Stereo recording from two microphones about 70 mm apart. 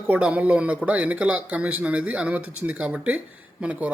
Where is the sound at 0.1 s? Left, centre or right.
Centre.